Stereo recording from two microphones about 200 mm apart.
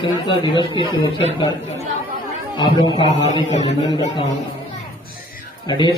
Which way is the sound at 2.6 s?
25° left (ahead or behind).